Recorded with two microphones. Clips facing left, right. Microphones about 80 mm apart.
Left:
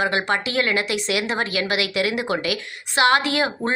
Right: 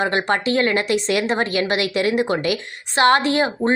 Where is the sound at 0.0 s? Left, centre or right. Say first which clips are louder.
Right 2 dB; right.